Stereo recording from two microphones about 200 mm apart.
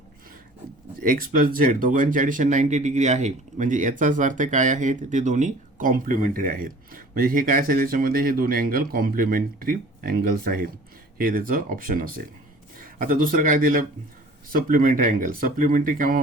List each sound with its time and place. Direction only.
1.0 s speech: 45° right (ahead or behind)